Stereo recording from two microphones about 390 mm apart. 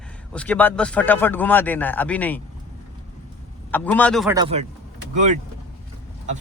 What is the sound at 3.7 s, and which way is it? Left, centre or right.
Speech, centre.